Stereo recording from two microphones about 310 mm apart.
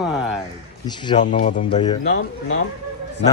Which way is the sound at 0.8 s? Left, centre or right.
Centre.